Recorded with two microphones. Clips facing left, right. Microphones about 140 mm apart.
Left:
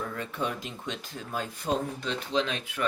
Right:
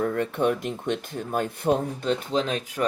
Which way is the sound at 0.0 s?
55° right (ahead or behind).